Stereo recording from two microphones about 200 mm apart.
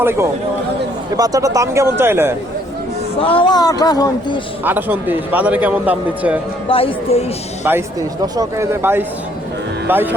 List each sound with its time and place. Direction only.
0.0 s a man's voice: 10° right (ahead or behind)
3.2 s speech: 25° left (ahead or behind)
4.6 s a man's voice: 10° right (ahead or behind)
6.7 s speech: 25° left (ahead or behind)
7.6 s a man's voice: 10° right (ahead or behind)